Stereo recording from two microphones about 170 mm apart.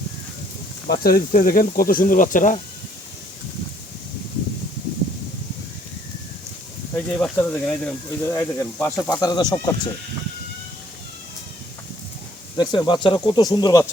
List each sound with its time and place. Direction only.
0.9 s speech: 60° left (ahead or behind)
6.9 s speech: 10° left (ahead or behind)
12.5 s speech: 25° left (ahead or behind)